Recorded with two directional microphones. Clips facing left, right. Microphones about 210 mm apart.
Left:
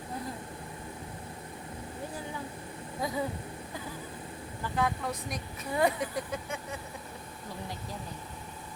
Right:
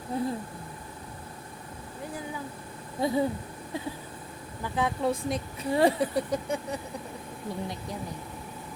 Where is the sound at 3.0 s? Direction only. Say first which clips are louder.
Right 7 dB; 30° right (ahead or behind).